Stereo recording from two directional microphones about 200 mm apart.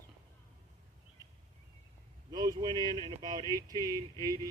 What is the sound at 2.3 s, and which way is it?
Speech, 20° right (ahead or behind).